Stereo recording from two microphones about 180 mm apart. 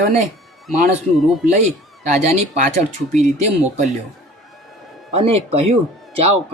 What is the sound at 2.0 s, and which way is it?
Speech, 40° right (ahead or behind).